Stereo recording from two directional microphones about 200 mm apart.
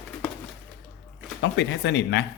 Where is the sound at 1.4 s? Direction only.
60° left (ahead or behind).